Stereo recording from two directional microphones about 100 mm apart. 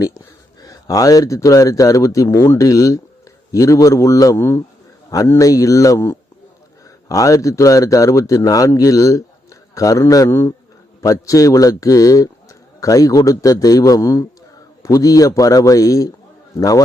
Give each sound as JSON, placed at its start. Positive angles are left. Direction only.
{"t": 0.6, "sound": "a man's voice", "side_deg": 35}